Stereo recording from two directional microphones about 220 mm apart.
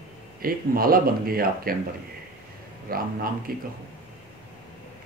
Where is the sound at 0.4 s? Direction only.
40° right (ahead or behind).